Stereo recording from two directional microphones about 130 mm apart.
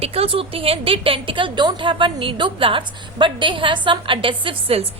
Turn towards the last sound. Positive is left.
turn(degrees=-45)  # may be behind; listen again after turning